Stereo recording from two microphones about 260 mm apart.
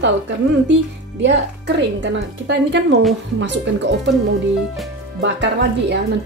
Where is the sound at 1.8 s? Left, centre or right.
Right.